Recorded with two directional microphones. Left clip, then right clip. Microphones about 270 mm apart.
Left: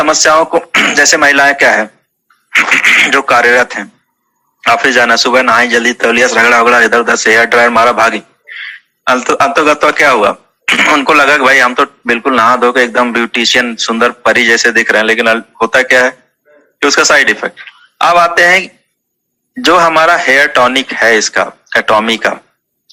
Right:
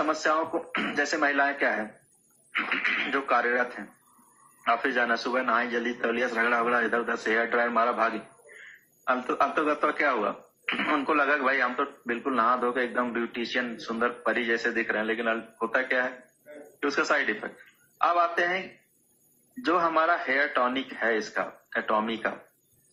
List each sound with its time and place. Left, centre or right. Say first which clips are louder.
0.0 s a man's voice: left 18 dB; left
19.6 s a man's voice: left 17 dB; left